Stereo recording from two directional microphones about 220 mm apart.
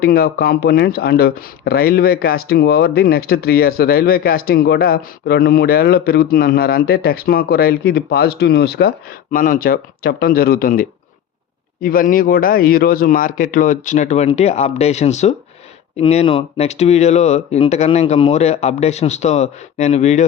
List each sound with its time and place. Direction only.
0.0 s a man's voice: 45° left (ahead or behind)